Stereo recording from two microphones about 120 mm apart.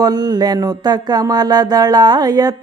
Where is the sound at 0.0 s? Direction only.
35° right (ahead or behind).